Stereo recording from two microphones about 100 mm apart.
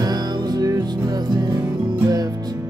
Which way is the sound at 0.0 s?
40° right (ahead or behind).